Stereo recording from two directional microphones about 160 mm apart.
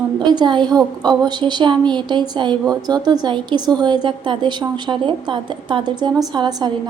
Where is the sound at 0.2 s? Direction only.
30° right (ahead or behind).